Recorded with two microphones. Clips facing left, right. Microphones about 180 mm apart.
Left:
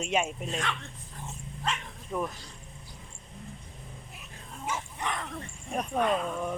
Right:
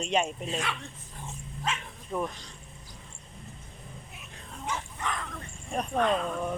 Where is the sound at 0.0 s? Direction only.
5° left (ahead or behind).